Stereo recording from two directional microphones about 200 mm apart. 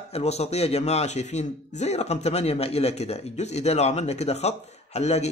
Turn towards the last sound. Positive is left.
turn(degrees=35)  # may be behind; listen again after turning